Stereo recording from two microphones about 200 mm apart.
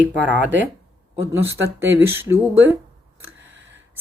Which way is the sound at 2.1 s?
10° right (ahead or behind).